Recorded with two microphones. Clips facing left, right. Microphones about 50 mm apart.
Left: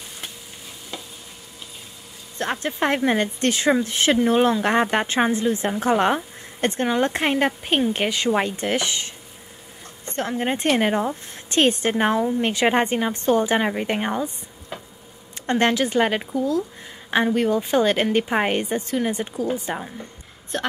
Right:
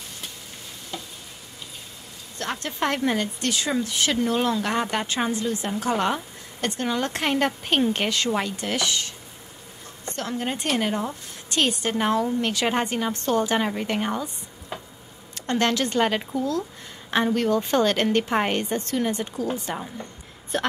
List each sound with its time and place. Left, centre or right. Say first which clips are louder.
2.3 s speech: left 5 dB; left
3.2 s speech: left 4 dB; left
10.1 s speech: left 5 dB; left
11.9 s speech: left 2 dB; left
14.7 s a sound: even; centre
15.3 s a woman's voice: left 3 dB; left
20.5 s a woman's voice: right 1 dB; centre